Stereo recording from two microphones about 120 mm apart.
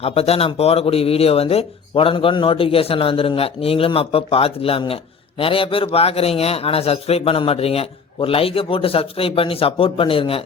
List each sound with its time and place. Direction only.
0.0 s a man's voice: 55° left (ahead or behind)